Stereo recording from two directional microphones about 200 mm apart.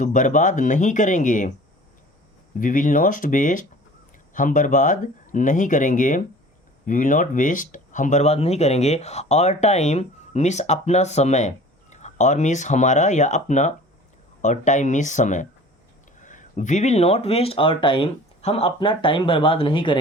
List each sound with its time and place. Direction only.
0.0 s speech: 40° left (ahead or behind)
2.6 s speech: 40° left (ahead or behind); by 20.0 s 25° left (ahead or behind)